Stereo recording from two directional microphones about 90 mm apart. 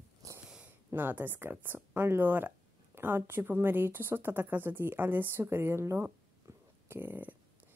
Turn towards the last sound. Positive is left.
turn(degrees=-20)  # may be behind; listen again after turning